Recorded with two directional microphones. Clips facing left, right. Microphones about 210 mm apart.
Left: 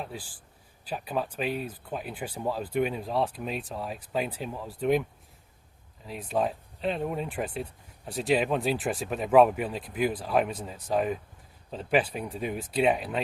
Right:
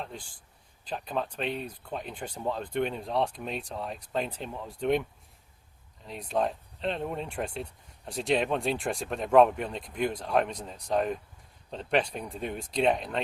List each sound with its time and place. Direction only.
0.0 s a man's voice: 5° left (ahead or behind)
6.1 s speech: 5° left (ahead or behind)